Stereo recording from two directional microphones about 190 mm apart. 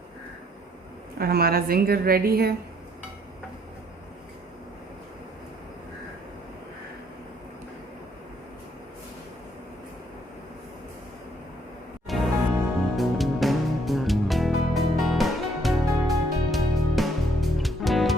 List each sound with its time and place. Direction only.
1.2 s a woman's voice: 55° right (ahead or behind)
12.1 s music: centre (ahead or behind)